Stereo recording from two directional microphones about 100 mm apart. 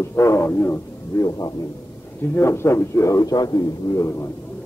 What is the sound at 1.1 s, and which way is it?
Speech, 35° left (ahead or behind).